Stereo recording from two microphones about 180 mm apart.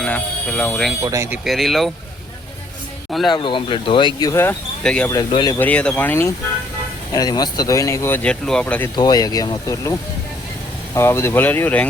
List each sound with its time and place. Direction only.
0.0 s speech: 5° left (ahead or behind)
1.0 s speech: 15° right (ahead or behind)
1.5 s speech: centre (ahead or behind)
3.1 s speech: centre (ahead or behind)
3.3 s speech: 25° left (ahead or behind); by 5.1 s 5° left (ahead or behind)
5.3 s speech: 25° left (ahead or behind)
5.5 s speech: 10° left (ahead or behind)
9.0 s speech: 20° left (ahead or behind)
10.9 s speech: 15° left (ahead or behind)